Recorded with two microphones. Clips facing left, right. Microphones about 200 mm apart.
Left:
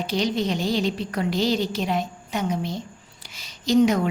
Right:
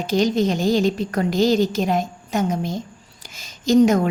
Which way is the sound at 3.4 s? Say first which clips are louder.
Right 4 dB; 45° right (ahead or behind).